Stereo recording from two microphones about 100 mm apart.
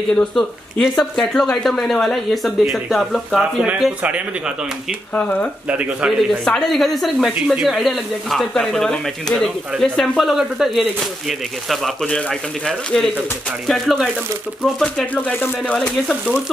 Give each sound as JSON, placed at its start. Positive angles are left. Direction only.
{"t": 0.1, "sound": "speech", "side_deg": 5}
{"t": 3.6, "sound": "a man's voice", "side_deg": -10}
{"t": 5.1, "sound": "speech", "side_deg": 10}
{"t": 5.7, "sound": "a man's voice", "side_deg": -10}
{"t": 6.4, "sound": "speech", "side_deg": 5}